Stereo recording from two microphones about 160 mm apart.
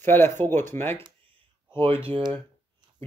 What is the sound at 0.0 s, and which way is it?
Speech, 15° left (ahead or behind).